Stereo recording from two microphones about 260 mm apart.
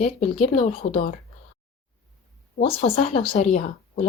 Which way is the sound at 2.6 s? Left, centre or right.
Left.